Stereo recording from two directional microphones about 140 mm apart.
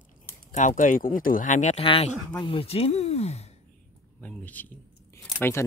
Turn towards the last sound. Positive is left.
turn(degrees=20)  # may be behind; listen again after turning